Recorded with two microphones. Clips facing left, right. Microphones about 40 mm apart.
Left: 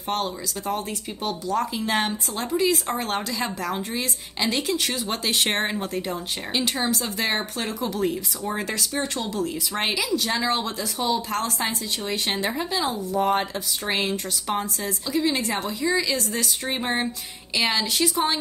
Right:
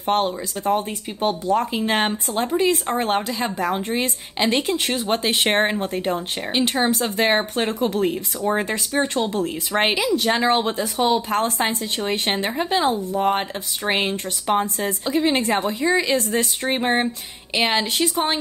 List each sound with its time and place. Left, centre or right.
0.0 s speech: right